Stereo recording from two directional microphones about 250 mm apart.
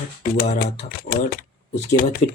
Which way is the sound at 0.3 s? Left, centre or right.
Left.